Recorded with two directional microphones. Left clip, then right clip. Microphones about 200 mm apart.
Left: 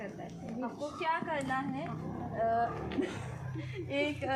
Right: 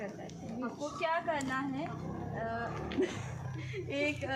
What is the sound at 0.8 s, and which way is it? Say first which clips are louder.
Speech: even; 10° left (ahead or behind).